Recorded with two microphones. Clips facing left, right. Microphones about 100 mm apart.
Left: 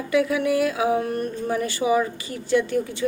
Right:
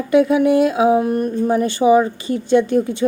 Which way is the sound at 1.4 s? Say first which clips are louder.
Right 9 dB; 30° right (ahead or behind).